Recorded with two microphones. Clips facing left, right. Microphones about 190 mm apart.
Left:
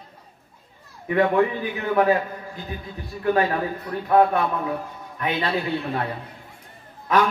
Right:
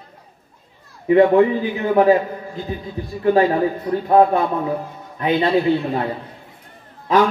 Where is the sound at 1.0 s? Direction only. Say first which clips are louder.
Right 7 dB; 25° right (ahead or behind).